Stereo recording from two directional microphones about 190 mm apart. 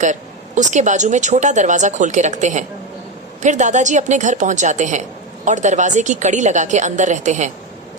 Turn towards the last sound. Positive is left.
turn(degrees=-40)  # may be behind; listen again after turning